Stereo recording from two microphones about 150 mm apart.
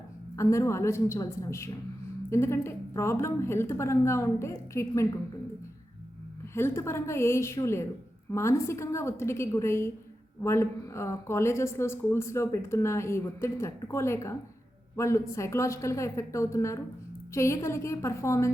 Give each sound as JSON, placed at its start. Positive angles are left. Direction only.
{"t": 0.3, "sound": "a woman's voice", "side_deg": 20}
{"t": 6.5, "sound": "a woman's voice", "side_deg": 15}